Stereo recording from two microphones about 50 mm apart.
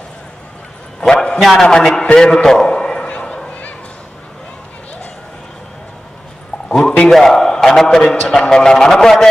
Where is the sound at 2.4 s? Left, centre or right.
Centre.